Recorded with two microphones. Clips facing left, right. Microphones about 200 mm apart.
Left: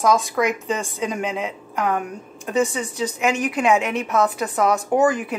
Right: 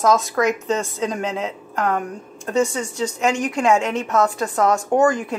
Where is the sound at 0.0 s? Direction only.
15° left (ahead or behind).